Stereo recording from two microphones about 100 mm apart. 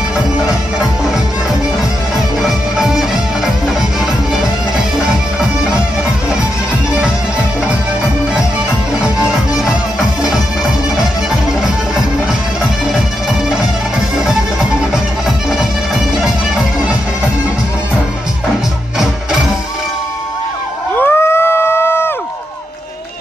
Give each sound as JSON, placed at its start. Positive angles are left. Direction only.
{"t": 2.1, "sound": "music", "side_deg": -5}
{"t": 9.9, "sound": "music", "side_deg": -5}
{"t": 14.1, "sound": "music", "side_deg": -5}
{"t": 21.0, "sound": "a sound", "side_deg": 25}